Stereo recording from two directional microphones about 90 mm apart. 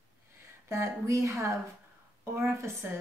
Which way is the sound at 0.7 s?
35° right (ahead or behind).